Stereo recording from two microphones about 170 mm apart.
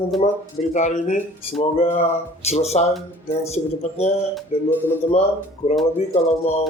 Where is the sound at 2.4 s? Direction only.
40° left (ahead or behind).